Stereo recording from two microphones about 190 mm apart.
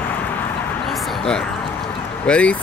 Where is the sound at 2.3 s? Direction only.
5° left (ahead or behind).